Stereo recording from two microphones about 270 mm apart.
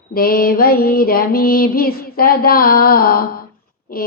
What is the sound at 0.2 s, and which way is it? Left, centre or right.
Mantra, left.